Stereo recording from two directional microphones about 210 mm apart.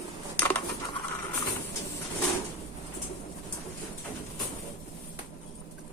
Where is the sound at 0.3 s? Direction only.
10° left (ahead or behind).